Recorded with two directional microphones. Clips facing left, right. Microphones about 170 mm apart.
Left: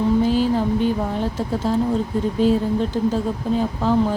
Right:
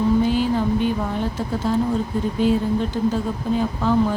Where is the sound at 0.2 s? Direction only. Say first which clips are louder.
Left 1 dB; 35° left (ahead or behind).